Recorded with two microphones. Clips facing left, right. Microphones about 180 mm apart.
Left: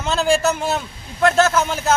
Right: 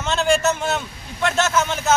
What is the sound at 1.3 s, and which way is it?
Speech, 35° left (ahead or behind).